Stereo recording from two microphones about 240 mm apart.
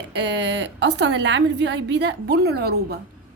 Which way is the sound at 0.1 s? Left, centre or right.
Right.